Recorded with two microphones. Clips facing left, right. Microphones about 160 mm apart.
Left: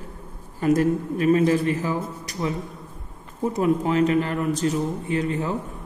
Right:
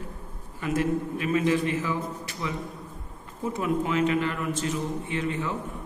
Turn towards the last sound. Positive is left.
turn(degrees=40)  # may be behind; listen again after turning